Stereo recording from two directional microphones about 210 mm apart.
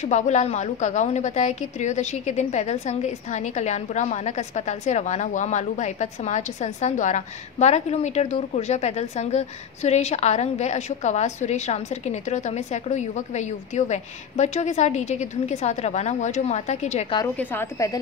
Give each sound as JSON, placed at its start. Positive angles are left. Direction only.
{"t": 0.0, "sound": "a woman's voice", "side_deg": 35}
{"t": 17.4, "sound": "a woman's voice", "side_deg": 10}